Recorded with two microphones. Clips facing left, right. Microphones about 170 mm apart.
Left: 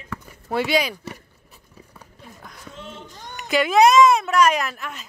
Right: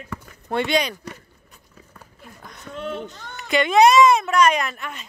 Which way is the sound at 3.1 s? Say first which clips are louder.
Left 1 dB; 15° left (ahead or behind).